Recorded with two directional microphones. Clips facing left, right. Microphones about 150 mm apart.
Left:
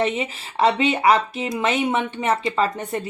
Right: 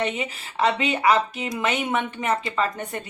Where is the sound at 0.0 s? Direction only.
35° left (ahead or behind).